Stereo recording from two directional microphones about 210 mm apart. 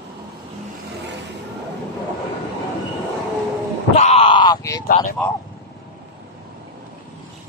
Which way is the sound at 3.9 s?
30° left (ahead or behind).